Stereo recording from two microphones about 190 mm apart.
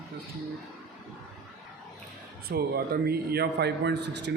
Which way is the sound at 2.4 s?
55° right (ahead or behind).